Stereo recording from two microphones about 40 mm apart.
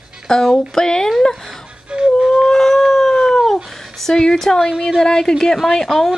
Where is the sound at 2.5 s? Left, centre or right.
Centre.